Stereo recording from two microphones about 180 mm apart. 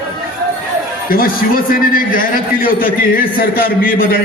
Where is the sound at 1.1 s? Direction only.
55° left (ahead or behind).